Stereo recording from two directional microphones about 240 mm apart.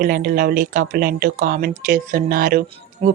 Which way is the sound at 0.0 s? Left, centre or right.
Right.